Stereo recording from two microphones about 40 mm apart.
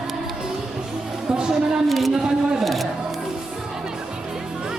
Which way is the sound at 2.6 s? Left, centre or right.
Centre.